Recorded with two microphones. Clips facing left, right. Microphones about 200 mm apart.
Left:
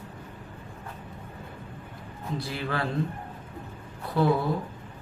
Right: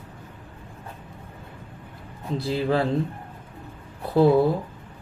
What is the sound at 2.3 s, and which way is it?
Speech, 25° right (ahead or behind).